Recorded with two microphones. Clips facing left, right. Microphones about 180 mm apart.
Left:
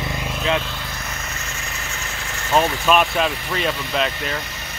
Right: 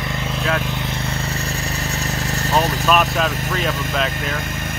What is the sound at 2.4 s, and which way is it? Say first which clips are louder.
Vehicle: left 1 dB; 40° right (ahead or behind).